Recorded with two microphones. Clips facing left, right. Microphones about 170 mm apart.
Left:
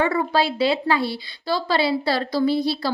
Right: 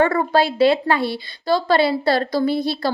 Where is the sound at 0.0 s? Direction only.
50° right (ahead or behind).